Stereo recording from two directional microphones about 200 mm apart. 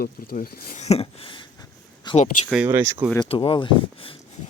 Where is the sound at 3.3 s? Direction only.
25° left (ahead or behind).